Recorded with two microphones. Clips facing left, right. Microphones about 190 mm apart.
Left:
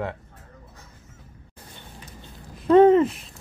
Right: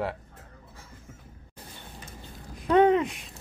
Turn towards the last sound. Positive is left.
turn(degrees=0)  # may be behind; listen again after turning